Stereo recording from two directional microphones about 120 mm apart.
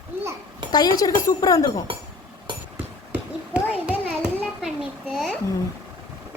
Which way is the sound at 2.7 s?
10° right (ahead or behind).